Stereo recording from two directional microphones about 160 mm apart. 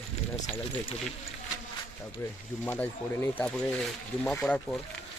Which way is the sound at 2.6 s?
10° left (ahead or behind).